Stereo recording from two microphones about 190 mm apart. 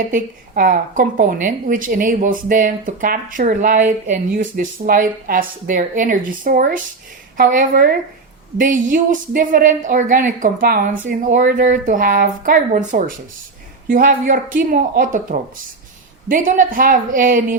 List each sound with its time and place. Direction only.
0.1 s speech: 45° right (ahead or behind)